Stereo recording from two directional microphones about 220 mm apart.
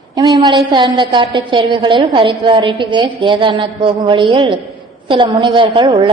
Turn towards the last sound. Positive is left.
turn(degrees=-20)  # may be behind; listen again after turning